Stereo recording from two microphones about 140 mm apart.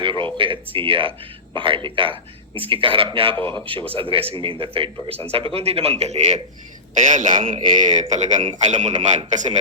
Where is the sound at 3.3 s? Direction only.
10° left (ahead or behind).